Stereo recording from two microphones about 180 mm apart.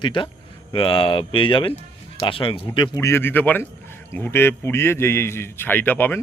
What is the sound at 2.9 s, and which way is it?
A man's voice, 15° left (ahead or behind).